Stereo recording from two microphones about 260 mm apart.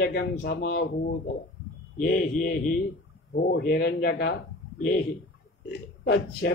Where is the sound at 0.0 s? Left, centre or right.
Left.